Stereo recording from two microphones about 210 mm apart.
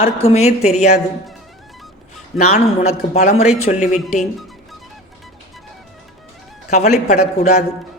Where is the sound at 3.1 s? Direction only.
30° left (ahead or behind).